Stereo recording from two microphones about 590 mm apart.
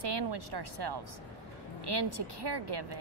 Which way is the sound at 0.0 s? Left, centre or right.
Right.